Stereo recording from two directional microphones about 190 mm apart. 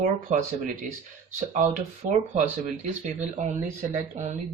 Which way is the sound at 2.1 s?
40° right (ahead or behind).